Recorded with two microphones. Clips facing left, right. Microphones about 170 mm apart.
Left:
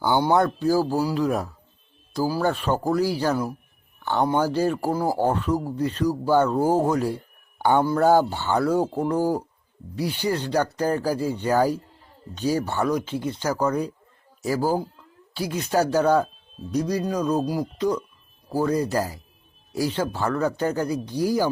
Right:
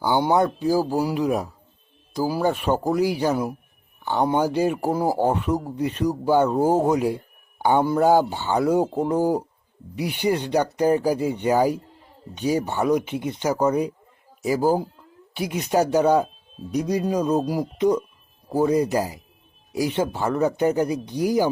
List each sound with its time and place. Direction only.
0.0 s speech: 10° right (ahead or behind)